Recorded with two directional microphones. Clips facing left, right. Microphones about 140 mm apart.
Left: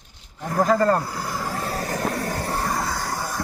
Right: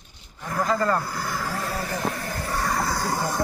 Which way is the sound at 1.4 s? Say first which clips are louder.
Left 2 dB; 35° left (ahead or behind).